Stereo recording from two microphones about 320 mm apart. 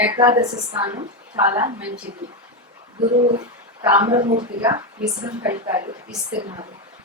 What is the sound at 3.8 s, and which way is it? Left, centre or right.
A woman's voice, centre.